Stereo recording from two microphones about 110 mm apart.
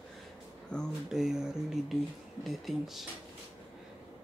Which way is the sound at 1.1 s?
5° right (ahead or behind).